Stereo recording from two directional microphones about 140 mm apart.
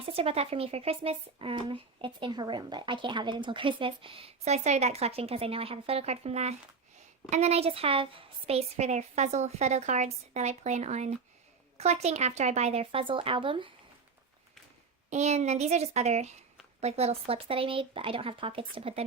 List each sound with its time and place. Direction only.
0.0 s a woman's voice: 45° right (ahead or behind)
15.1 s a woman's voice: 55° right (ahead or behind)